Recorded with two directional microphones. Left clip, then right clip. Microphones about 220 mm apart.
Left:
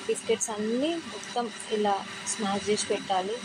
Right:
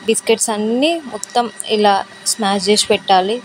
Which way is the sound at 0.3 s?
45° right (ahead or behind).